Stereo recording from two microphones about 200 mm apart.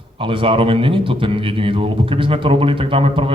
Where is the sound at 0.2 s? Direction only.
25° right (ahead or behind).